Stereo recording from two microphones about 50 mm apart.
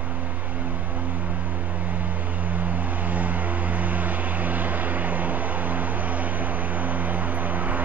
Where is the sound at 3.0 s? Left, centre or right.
Right.